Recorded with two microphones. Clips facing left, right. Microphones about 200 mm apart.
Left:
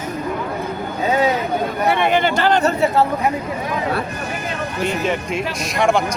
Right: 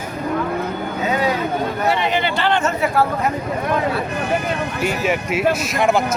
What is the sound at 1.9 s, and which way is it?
Speech, 55° left (ahead or behind).